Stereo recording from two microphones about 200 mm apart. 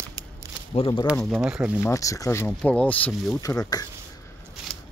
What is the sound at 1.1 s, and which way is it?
Speech, centre (ahead or behind).